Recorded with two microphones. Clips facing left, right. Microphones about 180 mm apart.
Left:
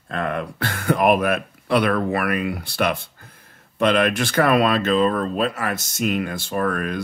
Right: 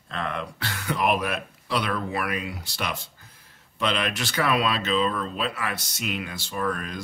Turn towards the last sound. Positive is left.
turn(degrees=60)  # may be behind; listen again after turning